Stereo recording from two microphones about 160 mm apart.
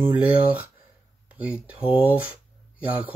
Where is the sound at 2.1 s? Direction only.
10° right (ahead or behind).